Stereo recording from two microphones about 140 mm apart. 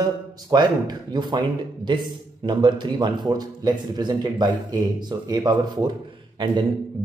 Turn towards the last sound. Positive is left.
turn(degrees=-30)  # may be behind; listen again after turning